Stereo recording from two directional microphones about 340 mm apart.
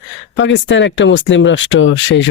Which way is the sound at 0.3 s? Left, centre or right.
Left.